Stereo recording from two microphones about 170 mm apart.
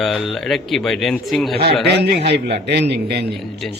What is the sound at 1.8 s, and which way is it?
Speech, 75° right (ahead or behind).